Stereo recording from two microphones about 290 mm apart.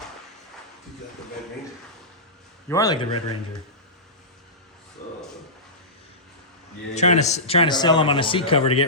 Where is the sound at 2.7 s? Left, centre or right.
Centre.